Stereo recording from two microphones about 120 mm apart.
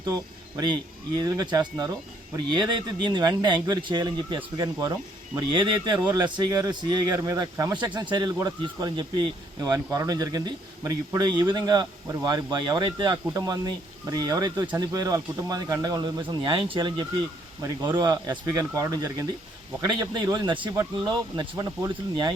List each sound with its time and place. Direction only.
0.0 s a man's voice: 30° right (ahead or behind)
13.2 s speech: 30° right (ahead or behind)
16.2 s a man's voice: 45° right (ahead or behind)
20.5 s speech: 40° right (ahead or behind)